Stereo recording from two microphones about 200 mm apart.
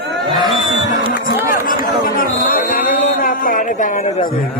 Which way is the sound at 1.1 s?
45° left (ahead or behind).